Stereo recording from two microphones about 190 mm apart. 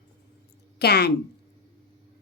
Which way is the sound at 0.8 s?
60° left (ahead or behind).